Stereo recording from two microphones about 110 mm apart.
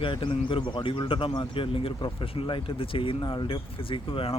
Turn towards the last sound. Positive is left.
turn(degrees=55)  # may be behind; listen again after turning